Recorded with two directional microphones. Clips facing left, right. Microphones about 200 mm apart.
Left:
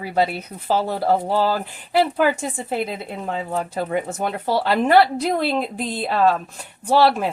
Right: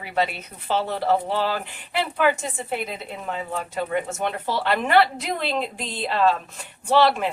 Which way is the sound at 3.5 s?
40° left (ahead or behind).